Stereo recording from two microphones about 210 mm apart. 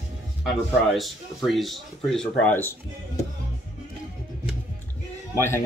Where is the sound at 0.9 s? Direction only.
Centre (ahead or behind).